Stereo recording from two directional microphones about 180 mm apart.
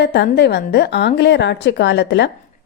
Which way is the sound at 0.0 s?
65° left (ahead or behind).